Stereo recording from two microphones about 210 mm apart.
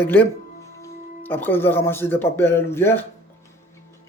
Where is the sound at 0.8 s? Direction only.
10° left (ahead or behind).